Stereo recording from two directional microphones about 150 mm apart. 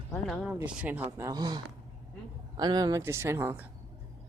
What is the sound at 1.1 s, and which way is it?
Speech, 20° right (ahead or behind).